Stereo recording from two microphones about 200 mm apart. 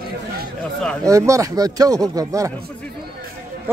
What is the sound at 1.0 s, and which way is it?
Speech, 15° right (ahead or behind).